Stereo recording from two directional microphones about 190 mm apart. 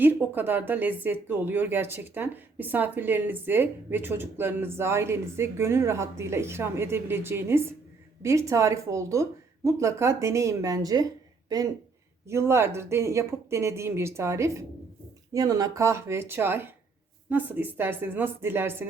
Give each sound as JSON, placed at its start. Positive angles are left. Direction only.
{"t": 0.0, "sound": "speech", "side_deg": -10}